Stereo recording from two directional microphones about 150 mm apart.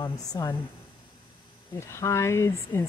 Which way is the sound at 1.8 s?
20° left (ahead or behind).